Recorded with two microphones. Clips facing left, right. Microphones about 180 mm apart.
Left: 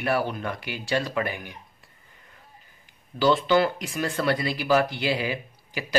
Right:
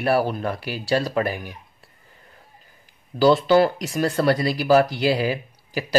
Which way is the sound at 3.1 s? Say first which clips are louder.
Right 5 dB; 40° right (ahead or behind).